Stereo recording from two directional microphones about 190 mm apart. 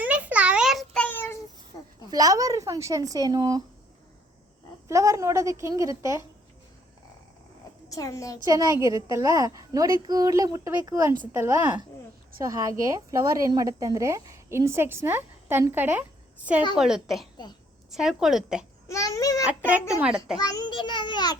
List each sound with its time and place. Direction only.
0.0 s a sound: 5° right (ahead or behind); by 1.4 s 10° left (ahead or behind)
2.0 s speech: 20° right (ahead or behind)
4.9 s a woman's voice: 15° right (ahead or behind)
7.9 s a woman's voice: 15° left (ahead or behind)
8.4 s a woman's voice: 15° right (ahead or behind); by 18.6 s centre (ahead or behind)
18.9 s a sound: 15° left (ahead or behind)
19.9 s a woman's voice: 5° right (ahead or behind)
20.4 s a child's voice: 20° left (ahead or behind)